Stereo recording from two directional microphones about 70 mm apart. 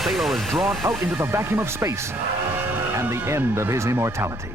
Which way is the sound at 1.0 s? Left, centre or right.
Right.